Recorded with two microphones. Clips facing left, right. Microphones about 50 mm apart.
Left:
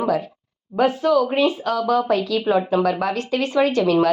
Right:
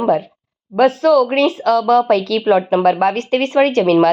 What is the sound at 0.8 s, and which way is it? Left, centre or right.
Speech, right.